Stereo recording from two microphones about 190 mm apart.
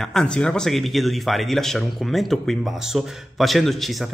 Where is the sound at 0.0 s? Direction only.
5° left (ahead or behind).